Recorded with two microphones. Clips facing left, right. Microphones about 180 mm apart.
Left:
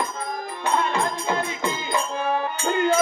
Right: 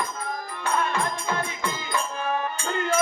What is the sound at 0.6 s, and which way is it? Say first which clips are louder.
Music: left 3 dB; 25° left (ahead or behind).